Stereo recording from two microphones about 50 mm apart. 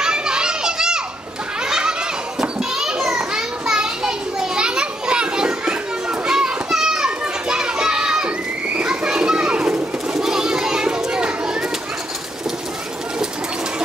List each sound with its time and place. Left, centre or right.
0.0 s children playing: centre
1.6 s a sound: centre
2.4 s children playing: centre